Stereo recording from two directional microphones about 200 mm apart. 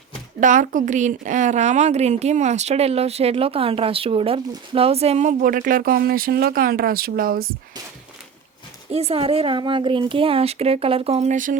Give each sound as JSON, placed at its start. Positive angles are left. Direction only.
{"t": 0.3, "sound": "a woman's voice", "side_deg": -40}
{"t": 8.9, "sound": "a woman's voice", "side_deg": -30}